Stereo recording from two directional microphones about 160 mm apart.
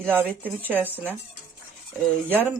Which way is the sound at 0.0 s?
10° right (ahead or behind).